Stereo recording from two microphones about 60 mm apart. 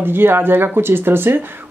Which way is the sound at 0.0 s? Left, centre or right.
Right.